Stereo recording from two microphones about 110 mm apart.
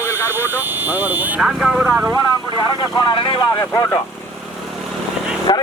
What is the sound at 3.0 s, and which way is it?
Speech, 45° left (ahead or behind).